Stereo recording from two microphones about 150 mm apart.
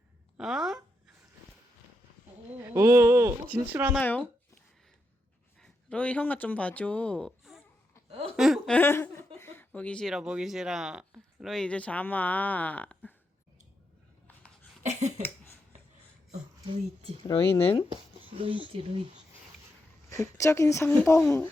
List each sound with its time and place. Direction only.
0.3 s speech: 5° right (ahead or behind)
2.6 s speech: 20° right (ahead or behind)
4.0 s speech: 10° left (ahead or behind)
5.5 s speech: 5° left (ahead or behind)
8.4 s a sound: centre (ahead or behind)
8.7 s speech: 15° left (ahead or behind)
14.8 s a sound: 50° right (ahead or behind)
17.2 s speech: 25° left (ahead or behind)
17.8 s speech: 35° right (ahead or behind)
20.4 s speech: 20° left (ahead or behind)